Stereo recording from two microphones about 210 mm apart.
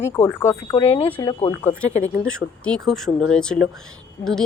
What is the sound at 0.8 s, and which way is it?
Speech, 25° left (ahead or behind).